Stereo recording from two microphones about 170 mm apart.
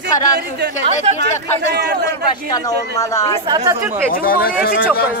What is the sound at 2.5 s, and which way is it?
Speech, 20° left (ahead or behind).